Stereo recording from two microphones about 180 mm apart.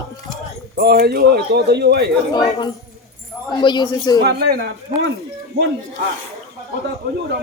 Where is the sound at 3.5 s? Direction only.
25° left (ahead or behind).